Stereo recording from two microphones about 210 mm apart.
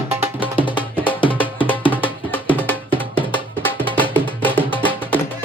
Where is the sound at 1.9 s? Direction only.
10° left (ahead or behind).